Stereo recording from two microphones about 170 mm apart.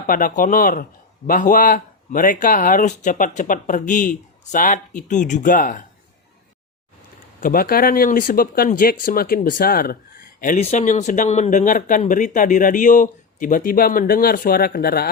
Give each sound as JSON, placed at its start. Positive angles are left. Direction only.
{"t": 0.1, "sound": "speech", "side_deg": 55}
{"t": 7.4, "sound": "speech", "side_deg": 60}
{"t": 10.4, "sound": "speech", "side_deg": 45}